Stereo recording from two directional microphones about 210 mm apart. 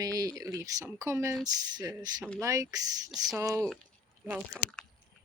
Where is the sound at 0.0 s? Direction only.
15° right (ahead or behind).